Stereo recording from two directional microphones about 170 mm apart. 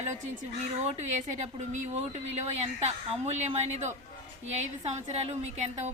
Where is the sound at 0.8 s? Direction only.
40° right (ahead or behind).